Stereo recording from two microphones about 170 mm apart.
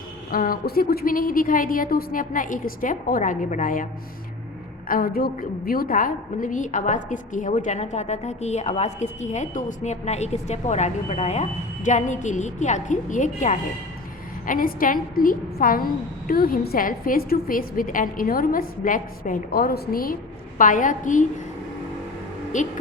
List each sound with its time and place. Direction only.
0.3 s a woman's voice: 55° left (ahead or behind)
4.9 s a woman's voice: 60° left (ahead or behind)
22.5 s a woman's voice: 45° left (ahead or behind)